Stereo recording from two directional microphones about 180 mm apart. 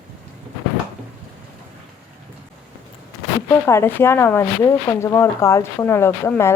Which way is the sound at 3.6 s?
15° left (ahead or behind).